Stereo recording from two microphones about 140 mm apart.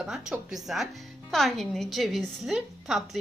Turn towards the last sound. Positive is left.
turn(degrees=0)  # may be behind; listen again after turning